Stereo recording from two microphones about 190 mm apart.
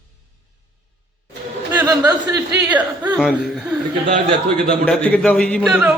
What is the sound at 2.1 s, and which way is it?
Speech, 20° right (ahead or behind).